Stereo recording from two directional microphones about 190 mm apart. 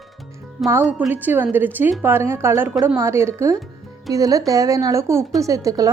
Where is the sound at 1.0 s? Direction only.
10° right (ahead or behind).